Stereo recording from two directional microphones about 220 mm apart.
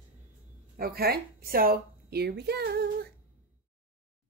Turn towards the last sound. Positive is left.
turn(degrees=-45)  # may be behind; listen again after turning